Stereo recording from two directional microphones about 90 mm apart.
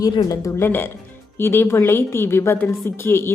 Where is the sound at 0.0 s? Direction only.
40° left (ahead or behind).